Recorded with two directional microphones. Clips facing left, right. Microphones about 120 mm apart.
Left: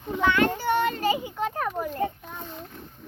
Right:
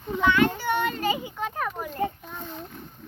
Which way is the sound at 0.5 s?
40° left (ahead or behind).